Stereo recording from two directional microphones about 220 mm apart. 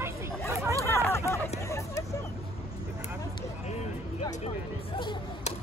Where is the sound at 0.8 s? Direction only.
10° left (ahead or behind).